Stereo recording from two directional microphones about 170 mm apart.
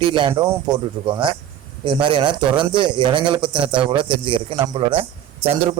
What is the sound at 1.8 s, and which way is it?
A man's voice, 30° right (ahead or behind).